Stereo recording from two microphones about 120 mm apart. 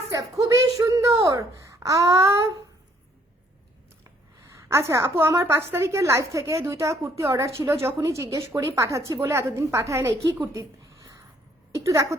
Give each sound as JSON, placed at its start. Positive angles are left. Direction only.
{"t": 0.1, "sound": "a woman's voice", "side_deg": -30}
{"t": 4.0, "sound": "a woman's voice", "side_deg": -25}
{"t": 10.4, "sound": "a sound", "side_deg": -25}
{"t": 11.9, "sound": "a woman's voice", "side_deg": -25}